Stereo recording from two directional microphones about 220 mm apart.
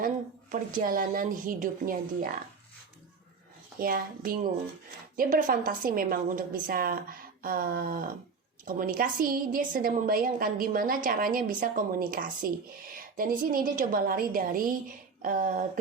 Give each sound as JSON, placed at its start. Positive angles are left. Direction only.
{"t": 0.5, "sound": "a woman's voice", "side_deg": -40}
{"t": 3.8, "sound": "a woman's voice", "side_deg": -40}